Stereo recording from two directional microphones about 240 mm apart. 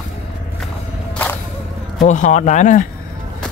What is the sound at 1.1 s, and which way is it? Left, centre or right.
Whip, centre.